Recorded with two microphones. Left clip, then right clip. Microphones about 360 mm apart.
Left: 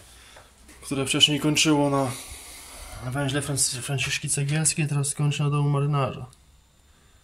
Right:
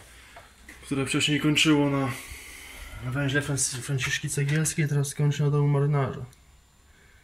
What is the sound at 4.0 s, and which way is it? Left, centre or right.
Speech, centre.